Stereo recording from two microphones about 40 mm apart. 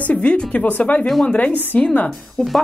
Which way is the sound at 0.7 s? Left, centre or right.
Left.